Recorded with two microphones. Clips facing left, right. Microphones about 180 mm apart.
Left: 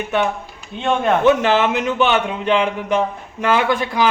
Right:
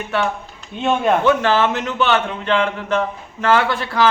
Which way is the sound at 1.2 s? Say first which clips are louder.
Left 1 dB; 20° left (ahead or behind).